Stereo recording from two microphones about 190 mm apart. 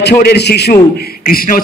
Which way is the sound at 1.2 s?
45° left (ahead or behind).